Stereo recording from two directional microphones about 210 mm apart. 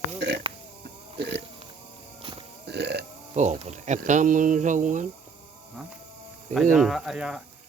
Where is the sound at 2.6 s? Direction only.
50° right (ahead or behind).